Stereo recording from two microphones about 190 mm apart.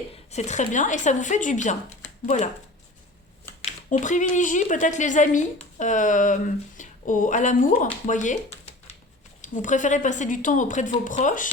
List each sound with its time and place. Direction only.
0.3 s a woman's voice: 35° left (ahead or behind)
3.6 s a woman's voice: 35° left (ahead or behind)